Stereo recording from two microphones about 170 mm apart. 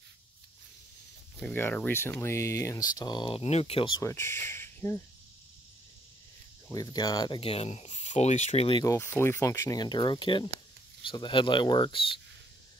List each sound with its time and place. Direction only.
1.4 s speech: 10° left (ahead or behind); by 4.0 s 30° left (ahead or behind)
4.0 s speech: 15° left (ahead or behind)
4.5 s insect: 15° left (ahead or behind)
6.7 s speech: 20° left (ahead or behind)
8.8 s speech: 15° left (ahead or behind)